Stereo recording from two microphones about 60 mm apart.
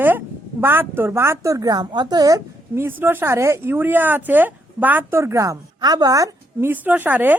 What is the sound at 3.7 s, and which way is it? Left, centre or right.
Speech, right.